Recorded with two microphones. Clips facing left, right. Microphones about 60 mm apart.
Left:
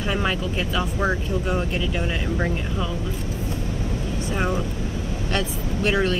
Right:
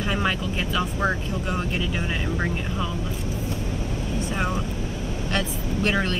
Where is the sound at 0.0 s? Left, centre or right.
Centre.